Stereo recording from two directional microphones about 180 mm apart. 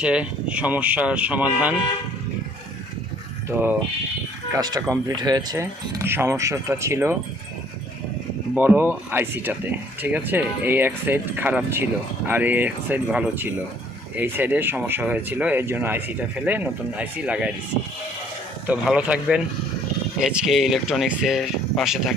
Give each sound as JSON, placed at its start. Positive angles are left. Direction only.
{"t": 0.0, "sound": "speech", "side_deg": -5}
{"t": 4.5, "sound": "speech", "side_deg": -20}
{"t": 8.5, "sound": "speech", "side_deg": -10}
{"t": 18.7, "sound": "speech", "side_deg": -5}